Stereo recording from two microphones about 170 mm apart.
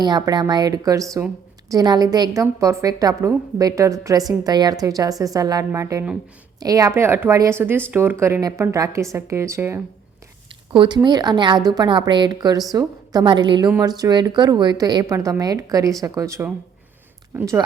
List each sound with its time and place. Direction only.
0.0 s a woman's voice: 25° right (ahead or behind)
10.7 s a woman's voice: 25° right (ahead or behind)